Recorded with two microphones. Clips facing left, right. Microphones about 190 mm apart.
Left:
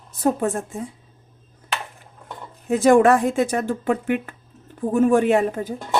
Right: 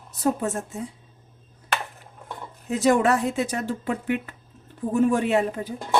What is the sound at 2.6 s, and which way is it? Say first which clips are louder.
Speech: left 6 dB; 55° left (ahead or behind).